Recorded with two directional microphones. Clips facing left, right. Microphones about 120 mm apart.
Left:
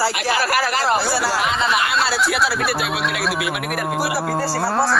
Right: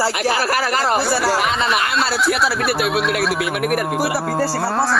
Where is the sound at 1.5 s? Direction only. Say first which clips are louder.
Even; centre (ahead or behind).